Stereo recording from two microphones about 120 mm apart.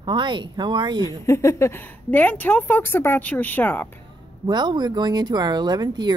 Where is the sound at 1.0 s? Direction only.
25° left (ahead or behind).